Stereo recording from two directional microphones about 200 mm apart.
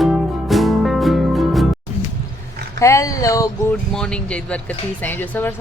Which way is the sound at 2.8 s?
15° left (ahead or behind).